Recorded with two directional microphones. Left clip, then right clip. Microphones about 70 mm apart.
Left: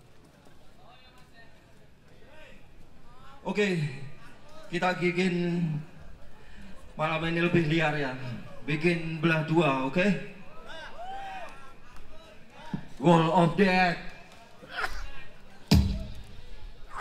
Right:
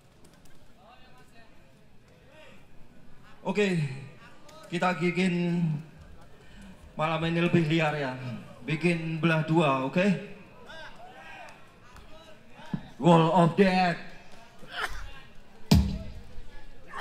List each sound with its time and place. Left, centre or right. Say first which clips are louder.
3.4 s a man's voice: right 1 dB; right
7.0 s a man's voice: even; right
13.0 s a man's voice: right 1 dB; right
14.7 s a sound: even; centre